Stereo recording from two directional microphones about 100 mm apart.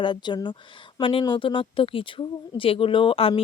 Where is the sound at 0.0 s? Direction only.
50° left (ahead or behind).